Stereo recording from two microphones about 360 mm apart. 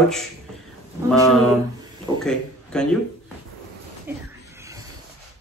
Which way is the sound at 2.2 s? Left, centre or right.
Centre.